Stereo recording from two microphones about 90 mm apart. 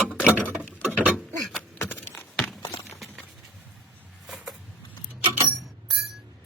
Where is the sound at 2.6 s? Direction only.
55° left (ahead or behind).